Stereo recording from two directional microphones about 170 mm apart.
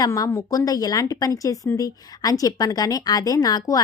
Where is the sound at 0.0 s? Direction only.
20° left (ahead or behind).